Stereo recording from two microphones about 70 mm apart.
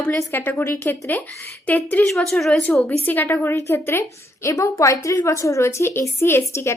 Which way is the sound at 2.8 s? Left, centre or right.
Left.